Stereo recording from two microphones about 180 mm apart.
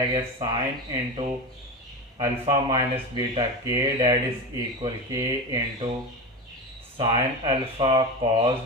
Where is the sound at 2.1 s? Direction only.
25° right (ahead or behind).